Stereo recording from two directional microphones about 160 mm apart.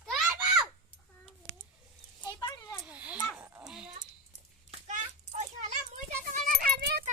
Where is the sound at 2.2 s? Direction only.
25° left (ahead or behind).